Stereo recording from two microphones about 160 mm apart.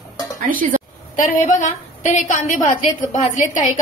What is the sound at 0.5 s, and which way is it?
Speech, 60° right (ahead or behind).